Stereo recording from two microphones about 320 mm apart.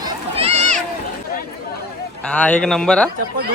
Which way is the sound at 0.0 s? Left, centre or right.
Centre.